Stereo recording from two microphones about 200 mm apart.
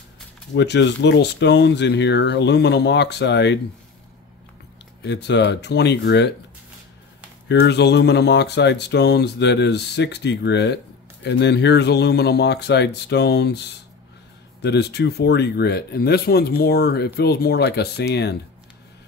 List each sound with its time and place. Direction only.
0.6 s speech: 60° left (ahead or behind)
5.0 s speech: 60° left (ahead or behind)
7.4 s speech: 60° left (ahead or behind)